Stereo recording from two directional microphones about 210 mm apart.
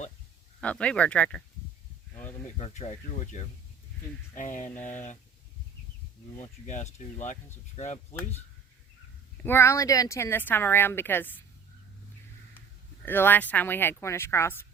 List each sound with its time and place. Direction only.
0.6 s speech: 5° left (ahead or behind)
2.6 s speech: 30° left (ahead or behind)
4.7 s speech: 10° left (ahead or behind)
6.4 s speech: 35° left (ahead or behind)
9.4 s speech: 10° left (ahead or behind)
13.1 s speech: 10° left (ahead or behind)